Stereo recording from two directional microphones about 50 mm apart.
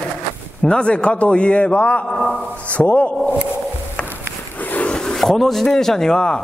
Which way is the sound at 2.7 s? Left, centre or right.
Left.